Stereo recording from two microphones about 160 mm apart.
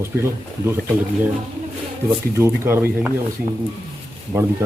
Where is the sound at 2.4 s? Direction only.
15° right (ahead or behind).